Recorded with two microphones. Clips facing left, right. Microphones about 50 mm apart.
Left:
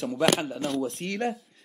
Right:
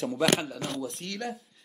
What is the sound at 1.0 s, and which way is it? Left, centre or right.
Speech, left.